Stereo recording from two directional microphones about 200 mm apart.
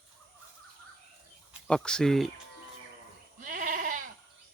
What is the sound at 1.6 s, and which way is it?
Speech, 5° left (ahead or behind).